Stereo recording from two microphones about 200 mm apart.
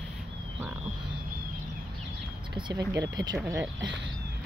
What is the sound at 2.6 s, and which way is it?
Speech, 20° right (ahead or behind).